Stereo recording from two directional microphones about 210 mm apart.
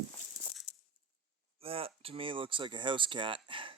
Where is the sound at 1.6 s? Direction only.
25° right (ahead or behind).